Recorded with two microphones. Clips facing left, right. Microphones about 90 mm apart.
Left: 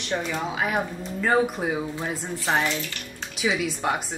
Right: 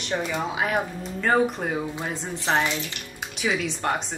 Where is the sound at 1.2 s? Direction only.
5° left (ahead or behind).